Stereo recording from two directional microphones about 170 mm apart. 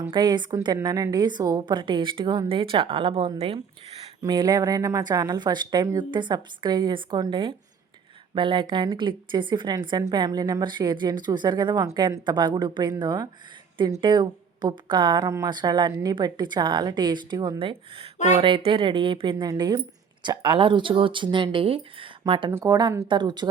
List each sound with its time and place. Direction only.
0.1 s a woman's voice: 25° right (ahead or behind)